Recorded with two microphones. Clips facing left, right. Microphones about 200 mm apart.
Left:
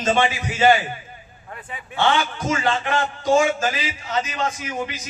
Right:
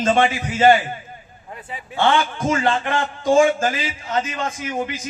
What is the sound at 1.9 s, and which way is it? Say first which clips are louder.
A man's voice: right 2 dB; 50° right (ahead or behind).